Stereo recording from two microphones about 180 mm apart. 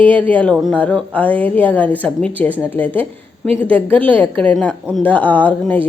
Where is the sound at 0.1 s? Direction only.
10° left (ahead or behind).